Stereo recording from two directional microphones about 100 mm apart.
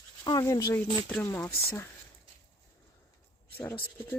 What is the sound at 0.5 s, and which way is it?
Speech, 30° left (ahead or behind).